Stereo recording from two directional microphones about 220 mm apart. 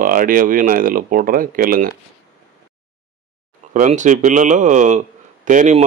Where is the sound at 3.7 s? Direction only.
35° right (ahead or behind).